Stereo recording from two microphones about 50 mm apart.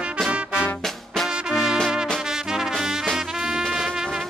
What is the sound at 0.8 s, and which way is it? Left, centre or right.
Music, centre.